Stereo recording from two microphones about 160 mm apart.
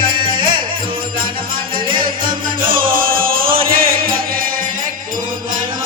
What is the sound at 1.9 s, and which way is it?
Music, 60° right (ahead or behind).